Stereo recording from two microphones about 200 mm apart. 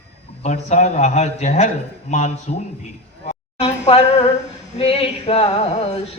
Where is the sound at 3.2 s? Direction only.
35° left (ahead or behind).